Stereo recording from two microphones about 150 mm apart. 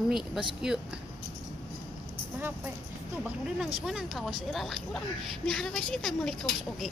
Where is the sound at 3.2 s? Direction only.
5° right (ahead or behind).